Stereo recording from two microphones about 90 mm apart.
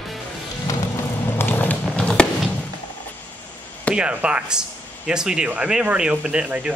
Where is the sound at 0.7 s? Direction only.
40° left (ahead or behind).